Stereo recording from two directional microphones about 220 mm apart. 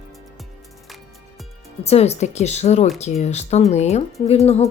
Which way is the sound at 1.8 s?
30° left (ahead or behind).